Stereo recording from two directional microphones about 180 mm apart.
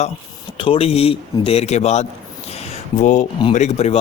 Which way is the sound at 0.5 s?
30° left (ahead or behind).